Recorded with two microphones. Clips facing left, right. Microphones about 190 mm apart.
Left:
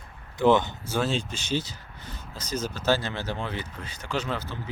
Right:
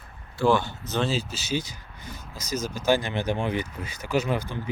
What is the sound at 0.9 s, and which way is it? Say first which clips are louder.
Speech: right 3 dB; 10° left (ahead or behind).